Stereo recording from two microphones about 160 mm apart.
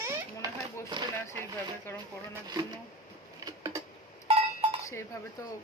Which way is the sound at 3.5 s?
25° right (ahead or behind).